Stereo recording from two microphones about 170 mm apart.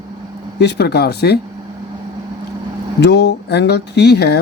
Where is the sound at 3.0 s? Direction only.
80° left.